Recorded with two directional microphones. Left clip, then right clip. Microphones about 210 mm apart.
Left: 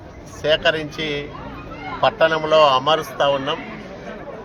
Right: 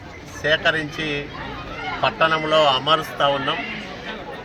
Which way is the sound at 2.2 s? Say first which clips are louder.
Left 2 dB; 20° left (ahead or behind).